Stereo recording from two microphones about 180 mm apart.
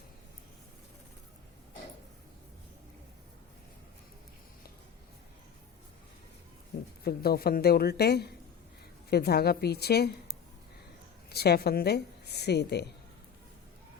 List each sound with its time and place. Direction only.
7.0 s a woman's voice: 60° left (ahead or behind)
11.3 s a woman's voice: 60° left (ahead or behind)